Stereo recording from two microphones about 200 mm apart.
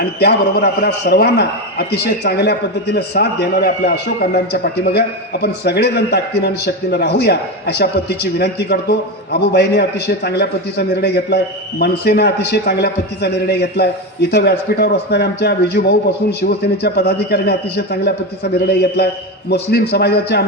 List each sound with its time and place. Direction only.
0.0 s a man's voice: 55° left (ahead or behind)